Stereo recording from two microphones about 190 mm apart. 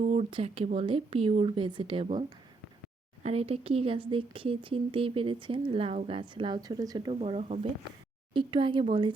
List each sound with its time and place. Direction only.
0.0 s speech: 35° right (ahead or behind)
3.2 s speech: 30° right (ahead or behind)
7.2 s speech: 35° right (ahead or behind)